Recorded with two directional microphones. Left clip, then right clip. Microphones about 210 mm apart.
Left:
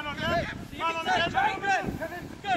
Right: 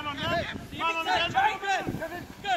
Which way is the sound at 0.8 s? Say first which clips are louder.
Even; 30° left (ahead or behind).